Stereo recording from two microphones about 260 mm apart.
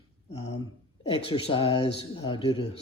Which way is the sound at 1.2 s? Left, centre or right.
Centre.